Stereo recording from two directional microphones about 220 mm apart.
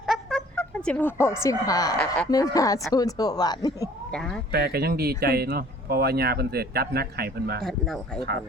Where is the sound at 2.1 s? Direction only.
15° left (ahead or behind).